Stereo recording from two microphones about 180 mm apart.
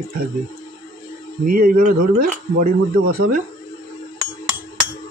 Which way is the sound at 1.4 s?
50° right (ahead or behind).